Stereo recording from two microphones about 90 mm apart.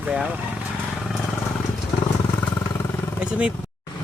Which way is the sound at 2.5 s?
30° left (ahead or behind).